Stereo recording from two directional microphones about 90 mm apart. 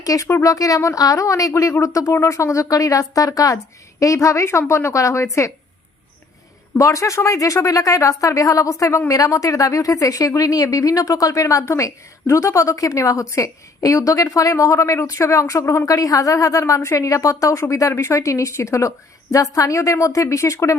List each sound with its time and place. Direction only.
0.0 s speech: 40° left (ahead or behind)
6.7 s speech: 35° left (ahead or behind)